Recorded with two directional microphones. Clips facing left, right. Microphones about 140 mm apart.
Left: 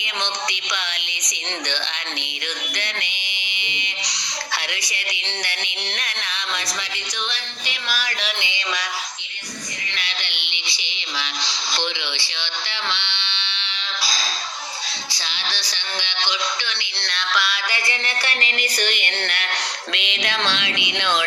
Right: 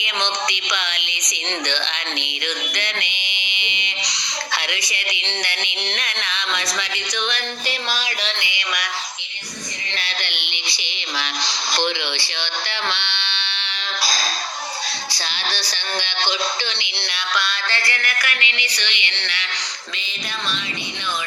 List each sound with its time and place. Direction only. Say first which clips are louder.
0.0 s speech: right 3 dB; 90° right
7.7 s music: right 1 dB; 25° right (ahead or behind)
8.4 s music: even; 20° left (ahead or behind)
9.9 s music: right 4 dB; 35° right (ahead or behind)
10.2 s speech: right 3 dB; 50° right (ahead or behind)
15.1 s music: right 2 dB; 40° right (ahead or behind)
16.6 s a sound: right 2 dB; 20° right (ahead or behind); by 19.5 s 55° left (ahead or behind)
19.9 s music: left 6 dB; 75° left (ahead or behind)